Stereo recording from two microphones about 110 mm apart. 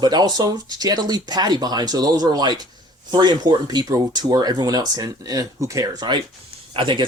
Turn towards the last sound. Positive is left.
turn(degrees=-50)  # may be behind; listen again after turning